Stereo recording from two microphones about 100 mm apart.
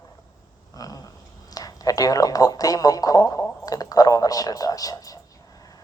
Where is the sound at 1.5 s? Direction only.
35° left (ahead or behind).